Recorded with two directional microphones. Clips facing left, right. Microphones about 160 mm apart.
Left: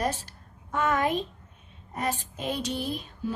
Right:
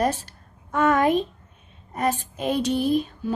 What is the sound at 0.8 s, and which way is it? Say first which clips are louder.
A woman's voice: right 6 dB; 60° right (ahead or behind).